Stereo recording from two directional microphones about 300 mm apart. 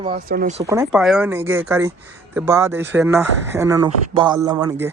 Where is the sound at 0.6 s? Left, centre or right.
Centre.